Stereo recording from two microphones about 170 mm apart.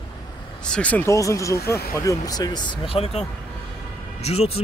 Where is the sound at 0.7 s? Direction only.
5° left (ahead or behind).